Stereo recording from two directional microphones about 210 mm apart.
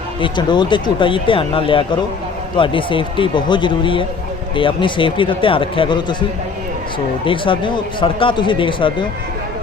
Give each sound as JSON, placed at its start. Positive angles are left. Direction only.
{"t": 0.2, "sound": "speech", "side_deg": 20}
{"t": 7.3, "sound": "speech", "side_deg": 25}